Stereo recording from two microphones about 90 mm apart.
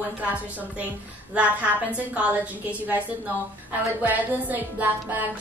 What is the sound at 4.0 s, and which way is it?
Music, 20° right (ahead or behind).